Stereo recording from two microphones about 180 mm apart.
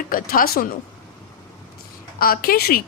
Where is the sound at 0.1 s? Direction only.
50° left (ahead or behind).